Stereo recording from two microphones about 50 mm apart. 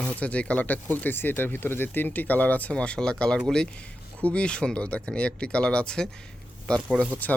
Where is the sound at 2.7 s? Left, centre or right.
Centre.